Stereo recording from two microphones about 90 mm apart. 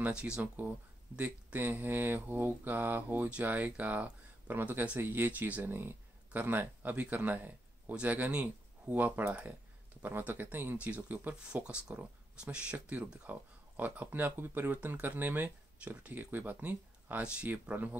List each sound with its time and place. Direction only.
0.0 s speech: 10° right (ahead or behind)